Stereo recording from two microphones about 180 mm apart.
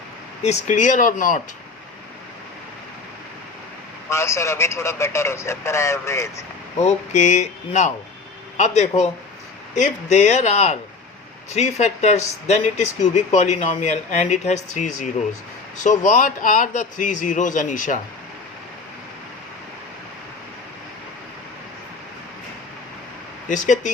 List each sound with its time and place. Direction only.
0.4 s a man's voice: 40° left (ahead or behind)
4.1 s speech: 15° left (ahead or behind)
6.8 s a man's voice: 40° left (ahead or behind)
23.5 s a man's voice: 45° left (ahead or behind)